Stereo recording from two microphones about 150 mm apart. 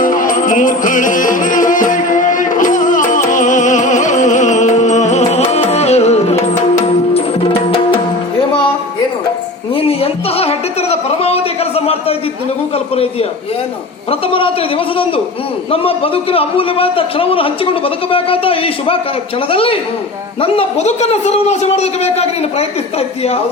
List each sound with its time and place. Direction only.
0.0 s music: 60° left (ahead or behind); by 7.9 s 40° left (ahead or behind)
9.7 s a sound: 40° left (ahead or behind)
12.7 s a man's voice: 40° left (ahead or behind)
15.7 s a man's voice: 40° left (ahead or behind)